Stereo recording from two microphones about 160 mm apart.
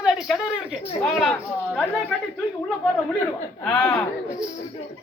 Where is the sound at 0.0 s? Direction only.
Centre (ahead or behind).